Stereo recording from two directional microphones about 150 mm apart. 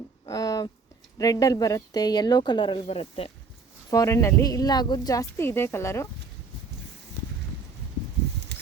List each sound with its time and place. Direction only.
0.3 s a sound: 25° left (ahead or behind)
1.2 s speech: 25° left (ahead or behind); by 3.3 s 40° left (ahead or behind)
3.8 s speech: 20° left (ahead or behind)